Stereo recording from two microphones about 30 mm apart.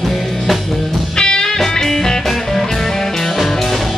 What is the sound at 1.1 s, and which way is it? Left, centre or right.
Music, left.